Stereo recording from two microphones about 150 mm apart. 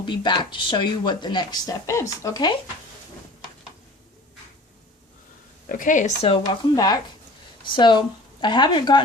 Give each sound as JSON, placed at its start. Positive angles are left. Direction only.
{"t": 0.0, "sound": "speech", "side_deg": 30}
{"t": 5.6, "sound": "speech", "side_deg": 60}
{"t": 6.4, "sound": "speech", "side_deg": 25}